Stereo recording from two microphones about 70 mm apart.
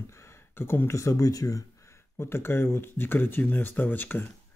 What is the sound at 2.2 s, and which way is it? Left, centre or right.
Speech, left.